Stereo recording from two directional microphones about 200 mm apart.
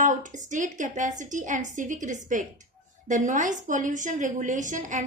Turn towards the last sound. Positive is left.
turn(degrees=-40)  # may be behind; listen again after turning